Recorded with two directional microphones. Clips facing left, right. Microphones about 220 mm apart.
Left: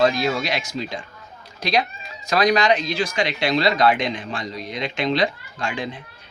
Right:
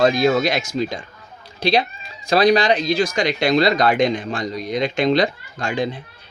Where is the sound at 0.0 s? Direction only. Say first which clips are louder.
Right 4 dB; 45° right (ahead or behind).